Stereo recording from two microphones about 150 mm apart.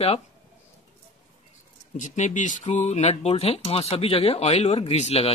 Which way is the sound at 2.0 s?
55° left (ahead or behind).